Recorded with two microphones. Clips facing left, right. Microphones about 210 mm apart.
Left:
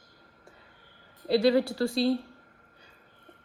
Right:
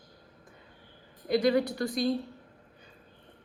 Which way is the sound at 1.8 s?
25° left (ahead or behind).